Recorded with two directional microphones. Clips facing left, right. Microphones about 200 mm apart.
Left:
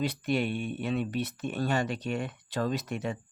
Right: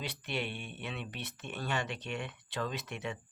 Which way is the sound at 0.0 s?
45° left (ahead or behind).